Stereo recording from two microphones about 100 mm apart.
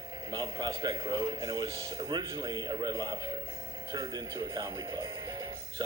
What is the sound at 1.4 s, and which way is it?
Speech, 60° right (ahead or behind).